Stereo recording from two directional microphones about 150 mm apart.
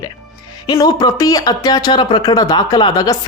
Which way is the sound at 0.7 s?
25° left (ahead or behind).